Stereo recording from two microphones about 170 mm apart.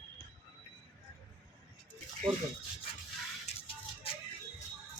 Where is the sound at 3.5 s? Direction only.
40° left (ahead or behind).